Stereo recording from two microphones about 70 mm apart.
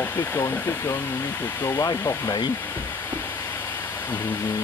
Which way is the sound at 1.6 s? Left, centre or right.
Left.